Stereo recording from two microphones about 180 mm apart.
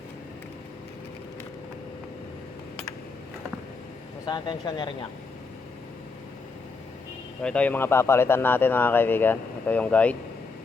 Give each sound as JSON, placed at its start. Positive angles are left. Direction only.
{"t": 4.3, "sound": "speech", "side_deg": 25}
{"t": 7.4, "sound": "speech", "side_deg": 5}